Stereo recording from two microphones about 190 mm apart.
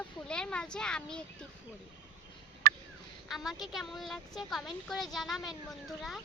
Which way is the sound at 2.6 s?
55° right (ahead or behind).